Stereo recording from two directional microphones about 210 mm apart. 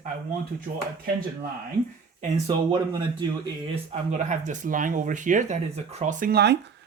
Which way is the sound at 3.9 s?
35° right (ahead or behind).